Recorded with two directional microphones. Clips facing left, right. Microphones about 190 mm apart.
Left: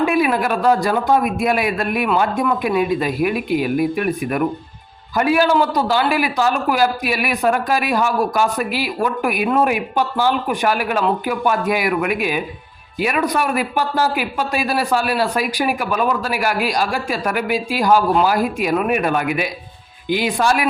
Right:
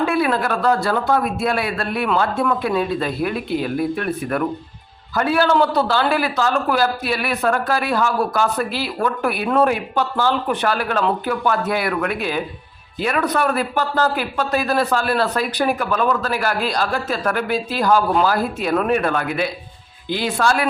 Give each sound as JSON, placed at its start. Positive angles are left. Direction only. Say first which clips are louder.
{"t": 0.0, "sound": "a man's voice", "louder": "left 2 dB", "side_deg": 15}